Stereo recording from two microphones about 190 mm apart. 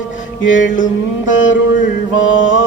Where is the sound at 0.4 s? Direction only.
90° left.